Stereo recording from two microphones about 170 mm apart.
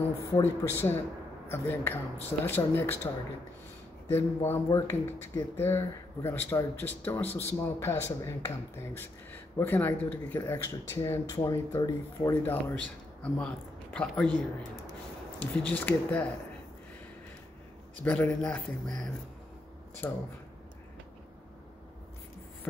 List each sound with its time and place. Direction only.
0.4 s speech: 15° left (ahead or behind)
4.1 s speech: 15° left (ahead or behind)
13.2 s a man's voice: 5° left (ahead or behind)
15.6 s speech: 10° left (ahead or behind)
18.0 s speech: 10° left (ahead or behind)